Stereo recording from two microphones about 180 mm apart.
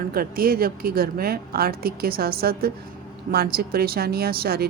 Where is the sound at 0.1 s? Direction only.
55° right (ahead or behind).